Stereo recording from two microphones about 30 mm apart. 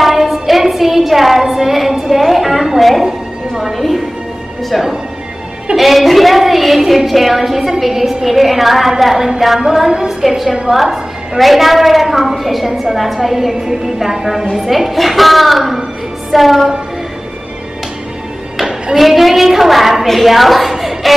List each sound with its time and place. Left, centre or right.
0.0 s a sound: centre
1.4 s child singing: centre
2.1 s a sound: centre
3.0 s music: centre
3.7 s a woman's voice: centre
5.8 s a woman's voice: centre
14.7 s a woman's voice: centre
16.3 s music: centre
18.9 s a woman's voice: centre